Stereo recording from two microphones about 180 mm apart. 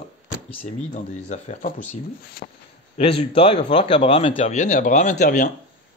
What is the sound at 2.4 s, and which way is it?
Speech, 60° left (ahead or behind).